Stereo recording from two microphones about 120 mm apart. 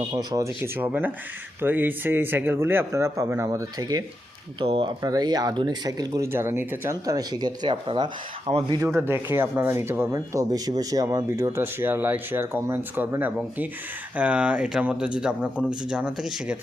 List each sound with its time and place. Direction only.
0.0 s speech: 40° right (ahead or behind)
0.3 s speech: 20° right (ahead or behind)
4.6 s speech: 45° right (ahead or behind)
5.0 s speech: 35° right (ahead or behind)
6.2 s speech: 20° right (ahead or behind)
7.0 s speech: 30° right (ahead or behind)
8.9 s speech: 20° right (ahead or behind)